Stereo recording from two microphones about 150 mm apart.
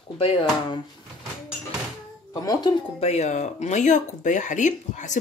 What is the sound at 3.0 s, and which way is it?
Speech, 45° left (ahead or behind).